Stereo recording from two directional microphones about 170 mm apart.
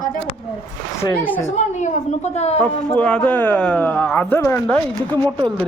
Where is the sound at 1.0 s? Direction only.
15° left (ahead or behind).